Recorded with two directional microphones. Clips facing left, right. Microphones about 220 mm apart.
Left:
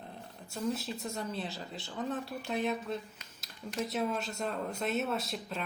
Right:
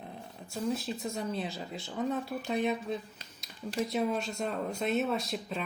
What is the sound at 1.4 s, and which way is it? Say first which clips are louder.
Speech: right 3 dB; centre (ahead or behind).